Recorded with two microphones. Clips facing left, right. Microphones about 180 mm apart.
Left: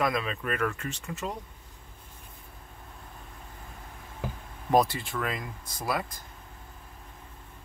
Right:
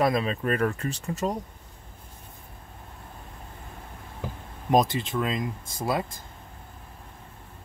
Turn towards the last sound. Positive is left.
turn(degrees=-25)  # may be behind; listen again after turning